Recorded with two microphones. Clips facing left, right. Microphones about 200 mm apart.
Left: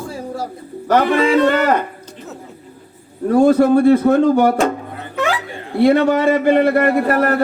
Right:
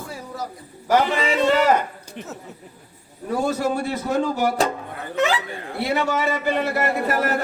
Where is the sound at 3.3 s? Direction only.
55° left (ahead or behind).